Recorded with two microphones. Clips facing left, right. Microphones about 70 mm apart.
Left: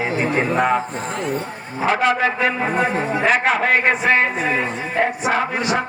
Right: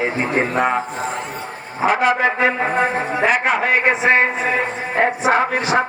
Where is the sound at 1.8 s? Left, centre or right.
Centre.